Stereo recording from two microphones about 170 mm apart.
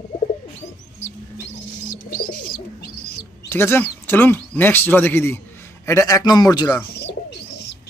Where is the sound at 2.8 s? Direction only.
65° left (ahead or behind).